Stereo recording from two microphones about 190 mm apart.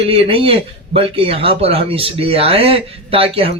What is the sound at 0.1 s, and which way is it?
A man's voice, 30° right (ahead or behind).